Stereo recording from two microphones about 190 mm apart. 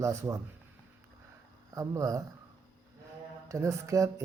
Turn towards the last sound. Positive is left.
turn(degrees=-15)  # may be behind; listen again after turning